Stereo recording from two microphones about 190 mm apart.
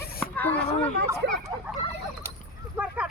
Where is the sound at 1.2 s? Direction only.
65° right (ahead or behind).